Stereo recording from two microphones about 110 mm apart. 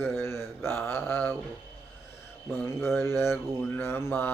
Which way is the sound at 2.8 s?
20° left (ahead or behind).